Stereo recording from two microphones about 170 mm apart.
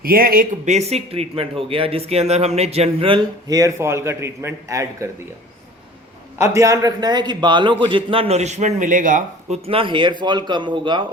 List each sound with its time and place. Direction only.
0.0 s speech: 60° right (ahead or behind); by 3.2 s 35° right (ahead or behind)
3.5 s a man's voice: 20° right (ahead or behind)
6.4 s a man's voice: 15° right (ahead or behind); by 9.6 s 50° right (ahead or behind)
9.6 s a man's voice: 30° right (ahead or behind)